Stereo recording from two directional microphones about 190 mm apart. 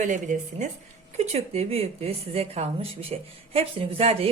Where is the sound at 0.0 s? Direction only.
40° right (ahead or behind).